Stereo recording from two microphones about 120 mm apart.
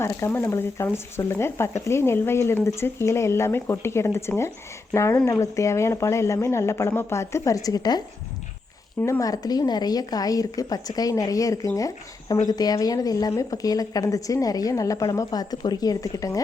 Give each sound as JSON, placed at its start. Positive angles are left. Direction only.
{"t": 0.0, "sound": "a woman's voice", "side_deg": 20}